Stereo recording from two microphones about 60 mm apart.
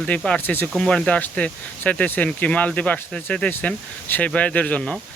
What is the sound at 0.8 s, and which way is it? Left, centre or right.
Speech, centre.